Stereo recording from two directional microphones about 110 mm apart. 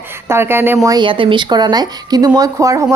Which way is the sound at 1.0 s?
50° right (ahead or behind).